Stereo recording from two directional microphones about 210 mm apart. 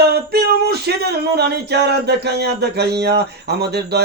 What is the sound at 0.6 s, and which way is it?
Speech, 50° right (ahead or behind).